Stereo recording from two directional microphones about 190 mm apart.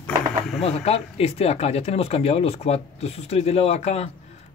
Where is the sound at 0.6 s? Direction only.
30° left (ahead or behind).